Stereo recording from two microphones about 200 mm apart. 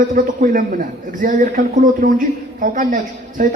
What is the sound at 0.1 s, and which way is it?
A man's voice, 40° right (ahead or behind).